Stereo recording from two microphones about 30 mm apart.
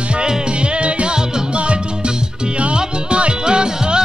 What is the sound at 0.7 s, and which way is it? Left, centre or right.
Music, right.